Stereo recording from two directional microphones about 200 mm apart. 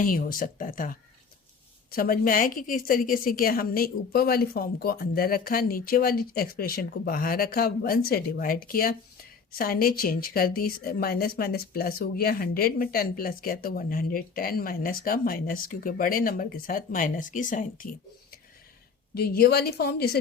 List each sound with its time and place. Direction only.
0.0 s speech: 45° left (ahead or behind)
19.1 s speech: 50° left (ahead or behind)